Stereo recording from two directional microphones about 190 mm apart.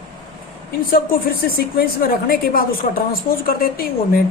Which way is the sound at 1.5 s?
50° left (ahead or behind).